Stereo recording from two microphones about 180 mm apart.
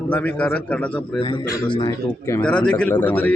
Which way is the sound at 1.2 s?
25° left (ahead or behind).